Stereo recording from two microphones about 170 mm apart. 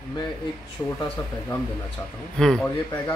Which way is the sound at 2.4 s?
5° left (ahead or behind).